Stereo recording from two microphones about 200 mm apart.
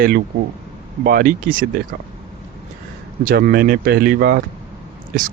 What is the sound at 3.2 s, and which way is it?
Speech, 45° right (ahead or behind).